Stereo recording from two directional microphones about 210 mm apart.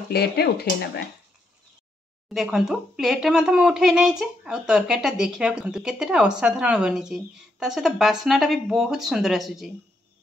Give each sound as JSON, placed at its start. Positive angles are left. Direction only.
{"t": 0.1, "sound": "speech", "side_deg": 50}
{"t": 2.2, "sound": "speech", "side_deg": 0}